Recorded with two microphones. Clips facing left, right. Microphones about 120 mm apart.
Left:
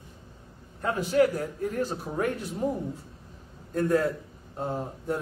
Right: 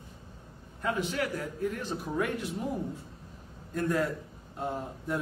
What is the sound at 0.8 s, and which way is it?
A man's voice, 40° left (ahead or behind).